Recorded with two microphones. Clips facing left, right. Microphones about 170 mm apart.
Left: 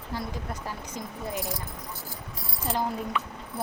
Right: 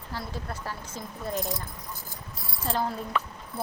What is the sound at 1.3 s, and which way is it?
Speech, 20° right (ahead or behind).